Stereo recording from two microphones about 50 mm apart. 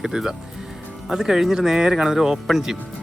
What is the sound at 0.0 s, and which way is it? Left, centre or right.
Speech, centre.